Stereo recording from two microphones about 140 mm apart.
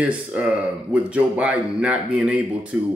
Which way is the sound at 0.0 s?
10° right (ahead or behind).